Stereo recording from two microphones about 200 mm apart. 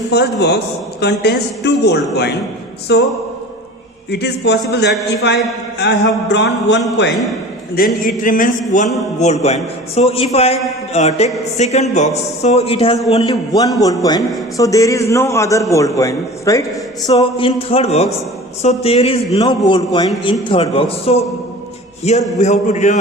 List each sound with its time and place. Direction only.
0.1 s speech: 55° left (ahead or behind)
4.1 s speech: 55° left (ahead or behind)
7.8 s a man's voice: 45° left (ahead or behind)
13.7 s a man's voice: 20° left (ahead or behind)
17.2 s speech: 25° left (ahead or behind)
22.4 s speech: 35° left (ahead or behind)